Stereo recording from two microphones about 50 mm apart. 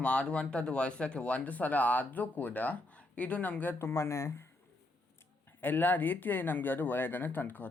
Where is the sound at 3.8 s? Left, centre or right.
Left.